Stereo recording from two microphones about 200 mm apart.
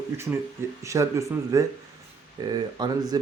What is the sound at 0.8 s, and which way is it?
Speech, 15° right (ahead or behind).